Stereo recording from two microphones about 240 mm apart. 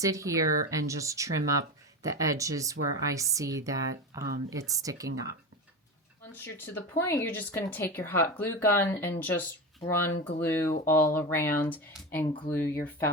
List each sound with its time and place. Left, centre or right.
0.0 s speech: centre
2.7 s a woman's voice: right
3.0 s speech: centre
6.3 s speech: centre
12.6 s speech: left